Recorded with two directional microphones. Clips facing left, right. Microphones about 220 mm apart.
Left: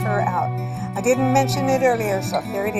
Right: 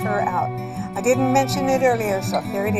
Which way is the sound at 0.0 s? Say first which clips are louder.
Even; centre (ahead or behind).